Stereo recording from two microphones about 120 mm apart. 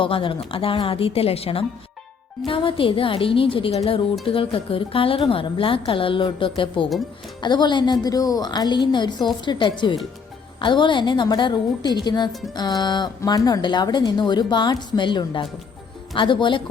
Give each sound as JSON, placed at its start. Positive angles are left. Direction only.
{"t": 0.0, "sound": "a woman's voice", "side_deg": 45}